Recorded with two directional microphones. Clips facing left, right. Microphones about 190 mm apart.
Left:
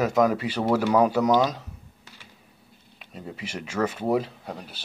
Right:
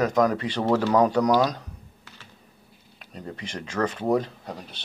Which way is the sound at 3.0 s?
5° left (ahead or behind).